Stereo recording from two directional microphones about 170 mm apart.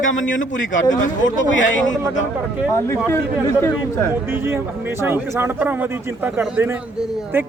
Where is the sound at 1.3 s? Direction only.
50° left (ahead or behind).